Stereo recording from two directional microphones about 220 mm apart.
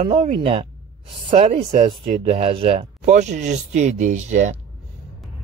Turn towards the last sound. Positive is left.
turn(degrees=-35)  # may be behind; listen again after turning